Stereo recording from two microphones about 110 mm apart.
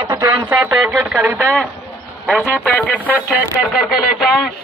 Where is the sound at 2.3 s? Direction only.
15° left (ahead or behind).